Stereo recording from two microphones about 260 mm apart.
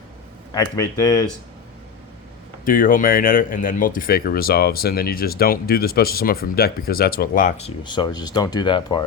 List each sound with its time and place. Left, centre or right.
0.5 s speech: centre
2.6 s speech: left
7.9 s speech: centre